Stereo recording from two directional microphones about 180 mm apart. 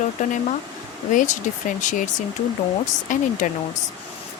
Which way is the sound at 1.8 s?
45° left (ahead or behind).